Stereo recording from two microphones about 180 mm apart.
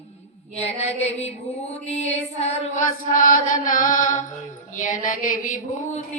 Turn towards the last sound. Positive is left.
turn(degrees=50)  # may be behind; listen again after turning